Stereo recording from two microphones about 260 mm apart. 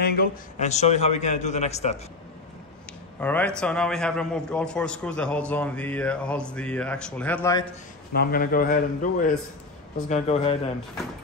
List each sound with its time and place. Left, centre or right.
0.0 s a man's voice: left
3.2 s a man's voice: centre
8.1 s a man's voice: left